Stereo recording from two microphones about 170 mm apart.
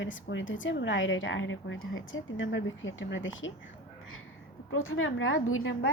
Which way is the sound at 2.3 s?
90° left.